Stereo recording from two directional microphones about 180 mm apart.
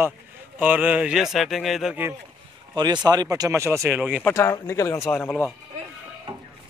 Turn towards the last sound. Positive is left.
turn(degrees=5)  # may be behind; listen again after turning